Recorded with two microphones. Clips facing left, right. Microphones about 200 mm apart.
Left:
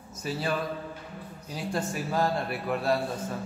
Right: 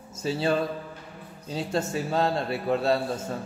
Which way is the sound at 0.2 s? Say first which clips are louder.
Right 5 dB; 25° right (ahead or behind).